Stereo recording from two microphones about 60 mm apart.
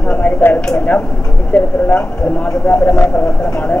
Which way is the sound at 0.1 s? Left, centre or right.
Left.